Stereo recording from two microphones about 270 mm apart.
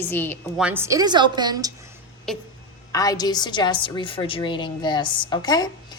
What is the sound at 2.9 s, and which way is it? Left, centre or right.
A woman's voice, centre.